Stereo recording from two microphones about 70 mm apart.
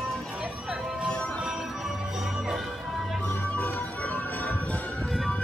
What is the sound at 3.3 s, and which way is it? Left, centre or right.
Music, left.